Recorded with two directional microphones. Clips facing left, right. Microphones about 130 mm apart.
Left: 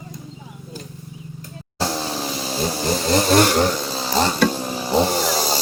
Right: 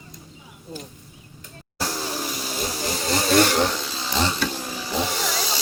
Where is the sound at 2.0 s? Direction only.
30° left (ahead or behind).